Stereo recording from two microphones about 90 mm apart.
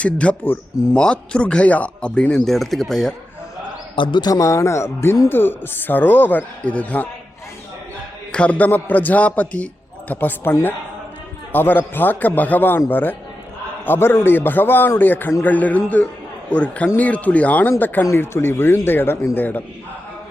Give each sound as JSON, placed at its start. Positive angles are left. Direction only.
{"t": 0.0, "sound": "speech", "side_deg": 15}
{"t": 3.9, "sound": "a man's voice", "side_deg": 70}
{"t": 4.2, "sound": "speech", "side_deg": 40}
{"t": 5.3, "sound": "a man's voice", "side_deg": 25}
{"t": 8.3, "sound": "a man's voice", "side_deg": 15}